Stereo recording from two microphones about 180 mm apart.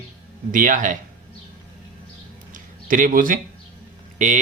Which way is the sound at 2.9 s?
50° right (ahead or behind).